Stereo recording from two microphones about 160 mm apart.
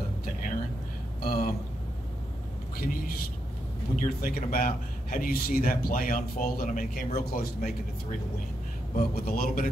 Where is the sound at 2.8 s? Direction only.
65° left (ahead or behind).